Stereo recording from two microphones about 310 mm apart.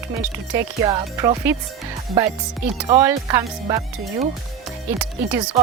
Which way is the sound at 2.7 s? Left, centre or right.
Centre.